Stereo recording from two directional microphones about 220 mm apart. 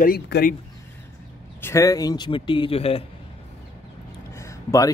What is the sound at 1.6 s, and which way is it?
Speech, 15° left (ahead or behind).